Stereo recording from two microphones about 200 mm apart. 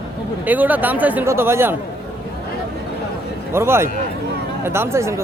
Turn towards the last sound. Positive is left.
turn(degrees=-15)  # may be behind; listen again after turning